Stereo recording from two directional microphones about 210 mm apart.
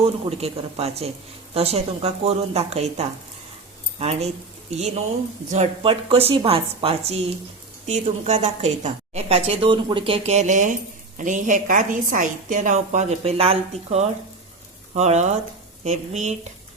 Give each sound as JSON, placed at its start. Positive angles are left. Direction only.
{"t": 0.3, "sound": "a woman's voice", "side_deg": -30}